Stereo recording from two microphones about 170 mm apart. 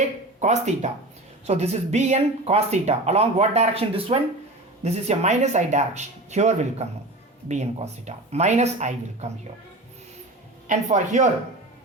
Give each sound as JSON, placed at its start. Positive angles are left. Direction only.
{"t": 0.3, "sound": "speech", "side_deg": -45}
{"t": 10.7, "sound": "speech", "side_deg": -45}